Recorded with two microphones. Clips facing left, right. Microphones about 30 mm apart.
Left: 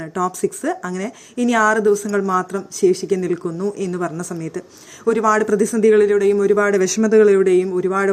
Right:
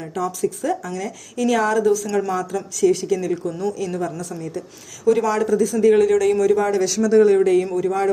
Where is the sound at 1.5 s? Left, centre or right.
Left.